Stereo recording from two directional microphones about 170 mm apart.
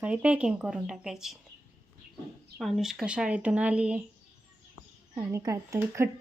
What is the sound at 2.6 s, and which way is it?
Speech, centre (ahead or behind).